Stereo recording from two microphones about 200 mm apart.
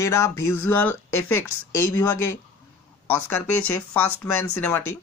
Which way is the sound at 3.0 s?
10° left (ahead or behind).